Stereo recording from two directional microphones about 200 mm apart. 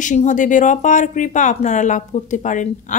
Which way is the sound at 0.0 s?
40° left (ahead or behind).